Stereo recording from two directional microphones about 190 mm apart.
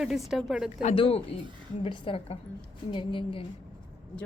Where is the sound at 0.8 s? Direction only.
30° left (ahead or behind).